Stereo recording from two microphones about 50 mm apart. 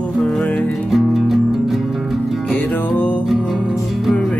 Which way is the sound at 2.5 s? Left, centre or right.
Left.